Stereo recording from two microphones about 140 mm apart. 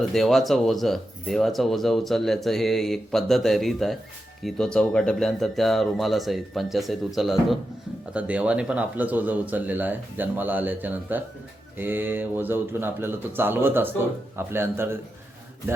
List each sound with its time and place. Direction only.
0.0 s speech: centre (ahead or behind); by 14.8 s 15° right (ahead or behind)